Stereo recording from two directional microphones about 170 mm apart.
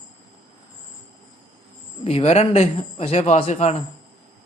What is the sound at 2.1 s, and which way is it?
Speech, 35° left (ahead or behind).